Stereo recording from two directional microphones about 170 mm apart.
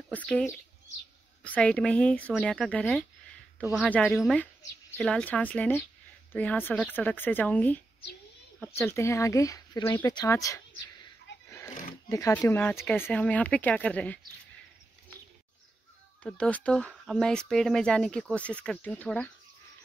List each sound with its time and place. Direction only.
0.1 s speech: 10° left (ahead or behind)
11.3 s a sound: 90° left
12.1 s speech: 20° left (ahead or behind)
16.2 s speech: 5° left (ahead or behind)